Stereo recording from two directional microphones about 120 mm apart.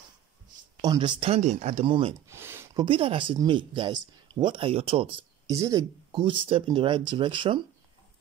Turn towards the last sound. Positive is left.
turn(degrees=-45)  # may be behind; listen again after turning